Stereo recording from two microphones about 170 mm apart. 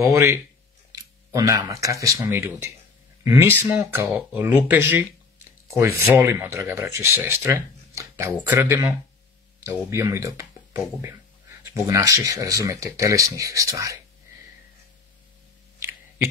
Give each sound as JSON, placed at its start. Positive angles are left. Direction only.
{"t": 0.1, "sound": "speech", "side_deg": -15}